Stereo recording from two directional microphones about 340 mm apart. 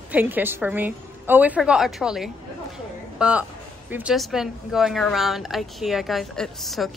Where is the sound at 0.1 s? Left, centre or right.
Centre.